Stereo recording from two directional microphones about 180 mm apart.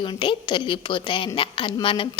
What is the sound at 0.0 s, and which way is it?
A woman's voice, 25° left (ahead or behind).